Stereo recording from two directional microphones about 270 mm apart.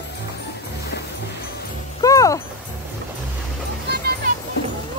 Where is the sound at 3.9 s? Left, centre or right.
Right.